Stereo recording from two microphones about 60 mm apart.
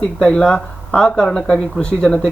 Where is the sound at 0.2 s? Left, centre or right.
Centre.